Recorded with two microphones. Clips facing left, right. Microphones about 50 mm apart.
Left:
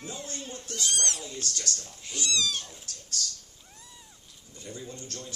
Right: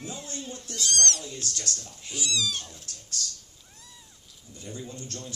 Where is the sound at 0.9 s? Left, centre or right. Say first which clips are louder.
Right 6 dB; centre.